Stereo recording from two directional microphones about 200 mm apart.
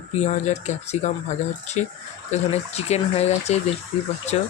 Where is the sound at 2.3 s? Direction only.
30° left (ahead or behind).